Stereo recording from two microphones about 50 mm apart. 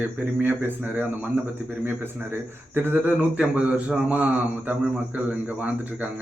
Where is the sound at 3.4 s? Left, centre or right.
Right.